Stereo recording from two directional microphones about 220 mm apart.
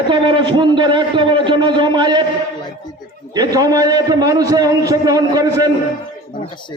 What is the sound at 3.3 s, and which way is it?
A man's voice, 15° right (ahead or behind).